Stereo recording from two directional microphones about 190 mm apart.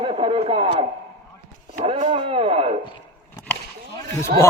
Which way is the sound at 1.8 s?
35° right (ahead or behind).